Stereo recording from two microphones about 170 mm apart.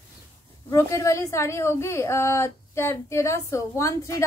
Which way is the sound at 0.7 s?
15° left (ahead or behind).